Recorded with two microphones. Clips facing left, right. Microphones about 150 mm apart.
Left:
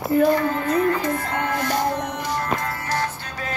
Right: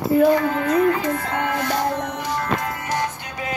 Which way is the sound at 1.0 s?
10° right (ahead or behind).